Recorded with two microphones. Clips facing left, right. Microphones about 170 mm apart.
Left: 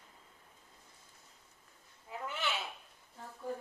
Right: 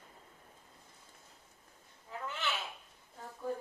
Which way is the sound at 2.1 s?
15° left (ahead or behind).